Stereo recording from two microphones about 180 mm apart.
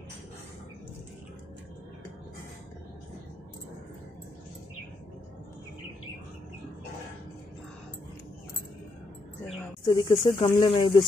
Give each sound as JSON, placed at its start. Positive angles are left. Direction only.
{"t": 9.8, "sound": "speech", "side_deg": 25}